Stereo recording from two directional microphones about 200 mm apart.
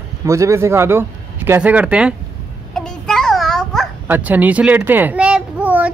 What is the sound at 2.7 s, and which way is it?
Babbling, 5° left (ahead or behind).